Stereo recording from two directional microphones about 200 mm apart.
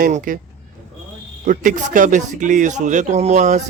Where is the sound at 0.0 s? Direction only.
45° right (ahead or behind).